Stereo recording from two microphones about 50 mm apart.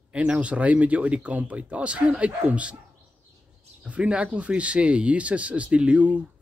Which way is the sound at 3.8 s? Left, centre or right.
Right.